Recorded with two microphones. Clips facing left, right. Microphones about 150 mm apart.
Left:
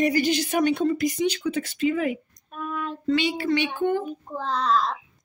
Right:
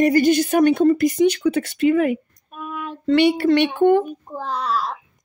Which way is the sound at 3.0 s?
60° right (ahead or behind).